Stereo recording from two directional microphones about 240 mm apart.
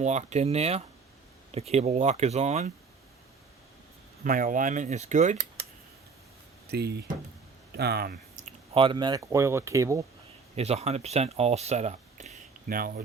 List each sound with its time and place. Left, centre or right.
0.0 s speech: right
4.2 s speech: right
6.7 s speech: right; by 10.0 s centre
10.5 s speech: right